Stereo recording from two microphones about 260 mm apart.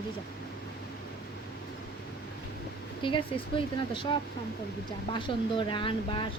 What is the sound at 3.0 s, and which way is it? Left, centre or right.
Speech, centre.